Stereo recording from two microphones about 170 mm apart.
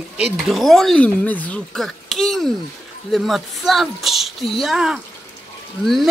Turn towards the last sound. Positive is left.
turn(degrees=0)  # may be behind; listen again after turning